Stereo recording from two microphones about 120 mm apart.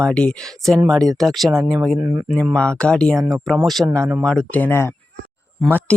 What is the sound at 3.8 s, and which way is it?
Speech, 15° right (ahead or behind).